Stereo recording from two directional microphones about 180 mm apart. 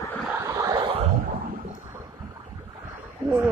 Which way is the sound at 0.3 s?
15° right (ahead or behind).